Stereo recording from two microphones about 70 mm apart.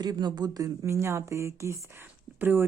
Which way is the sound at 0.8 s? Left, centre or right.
Right.